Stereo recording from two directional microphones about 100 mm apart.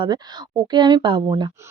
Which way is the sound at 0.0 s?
50° right (ahead or behind).